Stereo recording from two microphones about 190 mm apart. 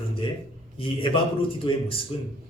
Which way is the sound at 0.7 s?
25° left (ahead or behind).